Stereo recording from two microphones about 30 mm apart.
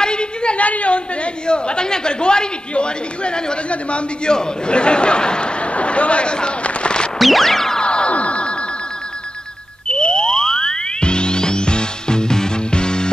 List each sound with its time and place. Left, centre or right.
0.0 s a sound: left
0.6 s a woman's voice: left
5.6 s a sound: left
7.2 s music: centre
7.8 s music: left
8.1 s telephone bell ringing: left
9.8 s music: left